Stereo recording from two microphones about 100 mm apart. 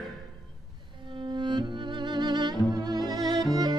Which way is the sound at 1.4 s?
50° right (ahead or behind).